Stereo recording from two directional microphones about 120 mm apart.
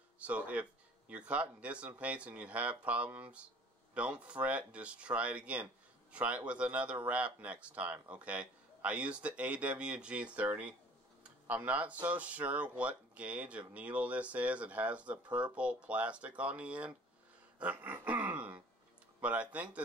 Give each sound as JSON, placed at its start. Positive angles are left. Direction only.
{"t": 0.2, "sound": "speech", "side_deg": -10}
{"t": 17.6, "sound": "a sound", "side_deg": -10}
{"t": 19.2, "sound": "speech", "side_deg": -10}